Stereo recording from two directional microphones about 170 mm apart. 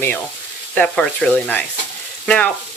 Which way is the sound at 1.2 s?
5° left (ahead or behind).